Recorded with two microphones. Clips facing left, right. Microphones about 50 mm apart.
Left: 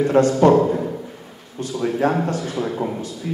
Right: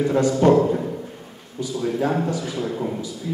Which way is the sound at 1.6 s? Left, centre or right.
Left.